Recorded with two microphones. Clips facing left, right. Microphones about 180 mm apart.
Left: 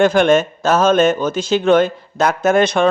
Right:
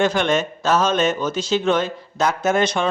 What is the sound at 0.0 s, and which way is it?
A man's voice, 50° left (ahead or behind).